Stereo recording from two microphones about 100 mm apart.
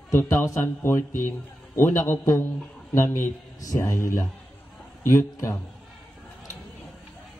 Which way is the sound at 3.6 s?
30° left (ahead or behind).